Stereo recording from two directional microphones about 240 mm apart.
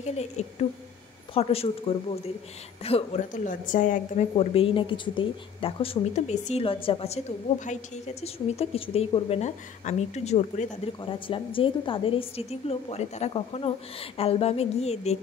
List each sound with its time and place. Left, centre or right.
0.0 s a woman's voice: left
2.8 s a woman's voice: left